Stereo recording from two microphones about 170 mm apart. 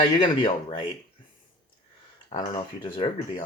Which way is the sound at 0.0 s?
30° left (ahead or behind).